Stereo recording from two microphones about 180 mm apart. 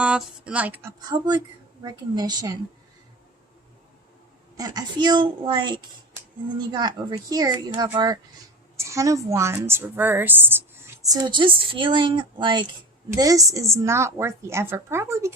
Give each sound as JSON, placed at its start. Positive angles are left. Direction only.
{"t": 0.0, "sound": "speech", "side_deg": -5}
{"t": 1.1, "sound": "a woman's voice", "side_deg": -25}
{"t": 4.5, "sound": "a woman's voice", "side_deg": -20}